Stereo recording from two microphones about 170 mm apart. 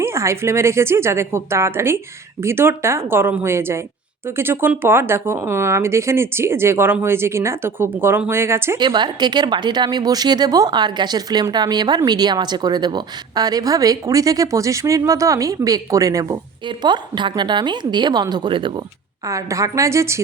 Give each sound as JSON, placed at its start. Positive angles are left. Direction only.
{"t": 0.0, "sound": "speech", "side_deg": -15}
{"t": 8.8, "sound": "speech", "side_deg": -25}